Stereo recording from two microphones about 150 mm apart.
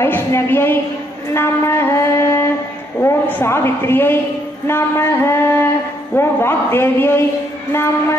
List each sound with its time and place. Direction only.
0.0 s a woman's voice: 15° left (ahead or behind)